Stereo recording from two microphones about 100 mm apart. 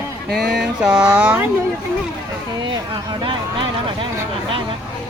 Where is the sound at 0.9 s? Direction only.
15° right (ahead or behind).